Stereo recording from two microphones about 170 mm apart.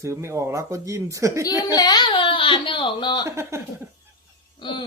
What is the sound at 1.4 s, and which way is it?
Speech, 20° left (ahead or behind).